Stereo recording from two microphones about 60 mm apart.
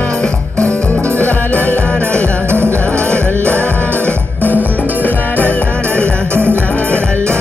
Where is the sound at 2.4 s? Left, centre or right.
Right.